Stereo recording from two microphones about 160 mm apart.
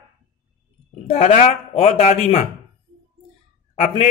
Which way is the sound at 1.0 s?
40° left (ahead or behind).